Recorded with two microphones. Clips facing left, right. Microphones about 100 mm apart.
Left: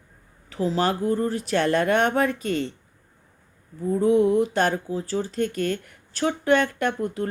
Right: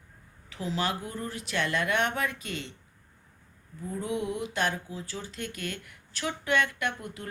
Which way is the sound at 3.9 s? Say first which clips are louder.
Left 13 dB; 40° left (ahead or behind).